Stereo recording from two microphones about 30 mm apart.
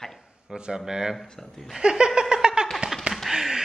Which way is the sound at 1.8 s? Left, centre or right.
Right.